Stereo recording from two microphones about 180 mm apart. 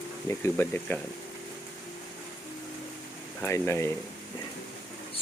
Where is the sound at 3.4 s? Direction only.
15° left (ahead or behind).